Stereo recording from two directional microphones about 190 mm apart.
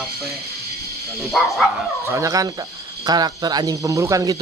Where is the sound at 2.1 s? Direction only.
15° right (ahead or behind).